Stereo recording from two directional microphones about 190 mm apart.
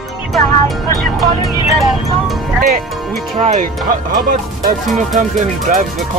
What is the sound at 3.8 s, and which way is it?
Speech, 50° right (ahead or behind).